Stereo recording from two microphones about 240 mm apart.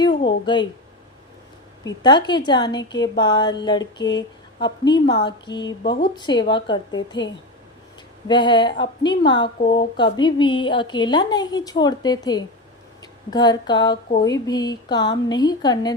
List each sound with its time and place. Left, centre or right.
0.4 s a woman's voice: centre
1.8 s a woman's voice: centre
8.3 s a woman's voice: centre